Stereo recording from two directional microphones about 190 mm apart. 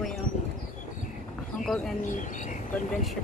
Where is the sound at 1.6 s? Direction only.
Centre (ahead or behind).